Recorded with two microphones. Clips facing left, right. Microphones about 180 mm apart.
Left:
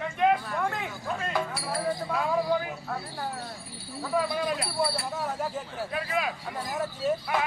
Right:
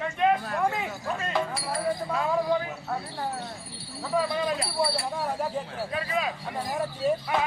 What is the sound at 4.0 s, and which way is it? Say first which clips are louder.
Speech: right 1 dB; centre (ahead or behind).